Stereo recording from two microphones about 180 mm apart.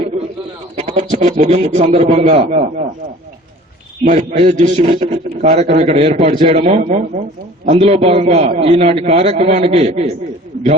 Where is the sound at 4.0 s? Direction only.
45° right (ahead or behind).